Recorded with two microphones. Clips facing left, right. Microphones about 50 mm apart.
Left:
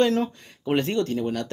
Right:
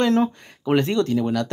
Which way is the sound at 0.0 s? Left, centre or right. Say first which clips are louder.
Right 2 dB; right.